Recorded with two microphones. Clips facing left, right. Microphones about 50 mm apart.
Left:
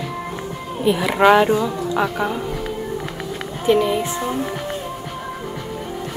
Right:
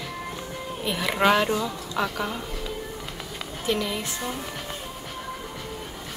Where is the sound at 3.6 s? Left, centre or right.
Left.